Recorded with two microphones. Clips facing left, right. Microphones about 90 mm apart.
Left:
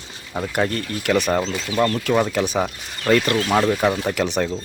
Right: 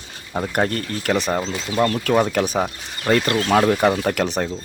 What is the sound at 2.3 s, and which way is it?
Speech, 45° right (ahead or behind).